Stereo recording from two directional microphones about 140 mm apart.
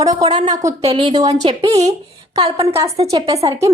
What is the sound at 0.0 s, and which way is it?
Speech, 25° right (ahead or behind).